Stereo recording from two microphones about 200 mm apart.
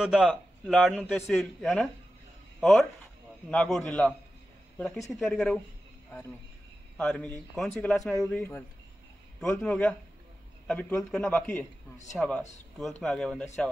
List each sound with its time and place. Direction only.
0.0 s a man's voice: centre (ahead or behind)
5.2 s a man's voice: 5° left (ahead or behind)
7.0 s a man's voice: 5° left (ahead or behind)